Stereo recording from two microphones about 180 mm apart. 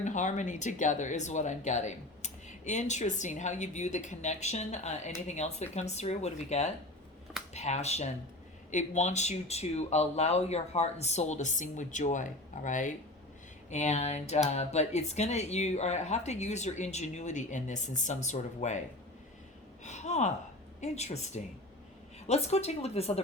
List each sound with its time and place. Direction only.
0.0 s speech: 45° left (ahead or behind)
19.8 s speech: 40° left (ahead or behind)